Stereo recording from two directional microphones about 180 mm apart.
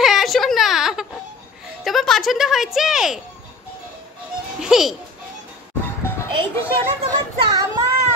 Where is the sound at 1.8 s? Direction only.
Centre (ahead or behind).